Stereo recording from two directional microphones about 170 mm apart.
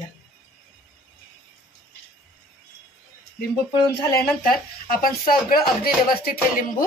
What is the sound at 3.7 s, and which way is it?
Speech, 25° left (ahead or behind).